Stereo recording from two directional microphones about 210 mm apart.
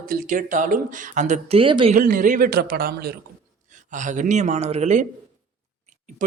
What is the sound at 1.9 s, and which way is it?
A man's voice, 40° right (ahead or behind).